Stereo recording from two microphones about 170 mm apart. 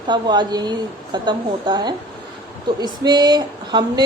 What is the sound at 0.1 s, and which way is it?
A woman's voice, 25° right (ahead or behind).